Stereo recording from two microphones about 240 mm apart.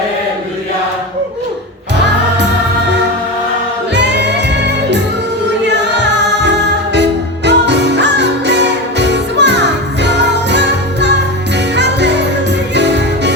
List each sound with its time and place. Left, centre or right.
3.9 s music: right
5.6 s music: right